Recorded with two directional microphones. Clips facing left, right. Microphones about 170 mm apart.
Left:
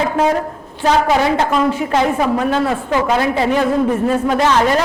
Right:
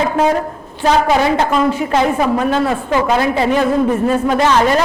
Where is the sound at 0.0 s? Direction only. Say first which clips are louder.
Right 1 dB; 20° right (ahead or behind).